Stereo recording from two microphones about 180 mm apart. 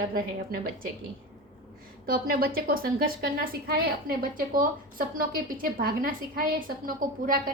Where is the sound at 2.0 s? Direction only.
55° right (ahead or behind).